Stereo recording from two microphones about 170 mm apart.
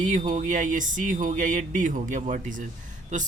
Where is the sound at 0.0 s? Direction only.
45° right (ahead or behind).